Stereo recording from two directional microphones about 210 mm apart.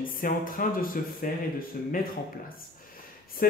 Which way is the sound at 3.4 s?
45° left (ahead or behind).